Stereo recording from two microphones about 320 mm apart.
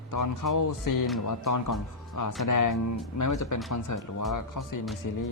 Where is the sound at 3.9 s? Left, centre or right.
Left.